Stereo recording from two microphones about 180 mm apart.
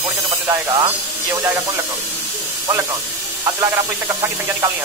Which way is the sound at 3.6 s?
15° right (ahead or behind).